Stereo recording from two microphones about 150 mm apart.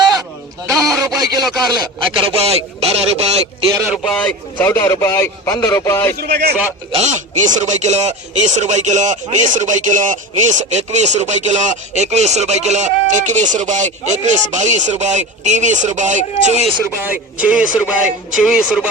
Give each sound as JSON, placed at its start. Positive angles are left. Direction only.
{"t": 0.7, "sound": "a sound", "side_deg": 0}
{"t": 0.9, "sound": "speech", "side_deg": -25}
{"t": 3.9, "sound": "a man's voice", "side_deg": 5}
{"t": 6.1, "sound": "a man's voice", "side_deg": -90}
{"t": 6.9, "sound": "speech", "side_deg": -50}
{"t": 16.8, "sound": "speech", "side_deg": -15}